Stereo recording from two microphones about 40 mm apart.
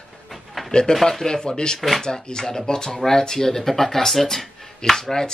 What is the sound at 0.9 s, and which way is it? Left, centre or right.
Speech, centre.